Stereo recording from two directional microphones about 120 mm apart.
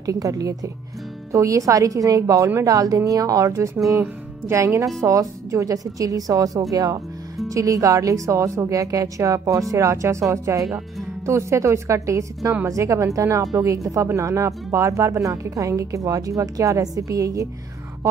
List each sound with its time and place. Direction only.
0.0 s speech: 30° right (ahead or behind)